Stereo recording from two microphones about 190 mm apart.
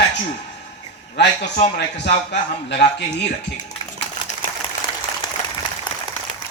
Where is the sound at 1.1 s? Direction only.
60° left (ahead or behind).